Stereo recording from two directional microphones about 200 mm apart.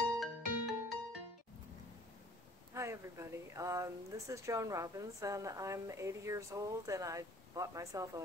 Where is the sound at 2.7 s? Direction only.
15° right (ahead or behind).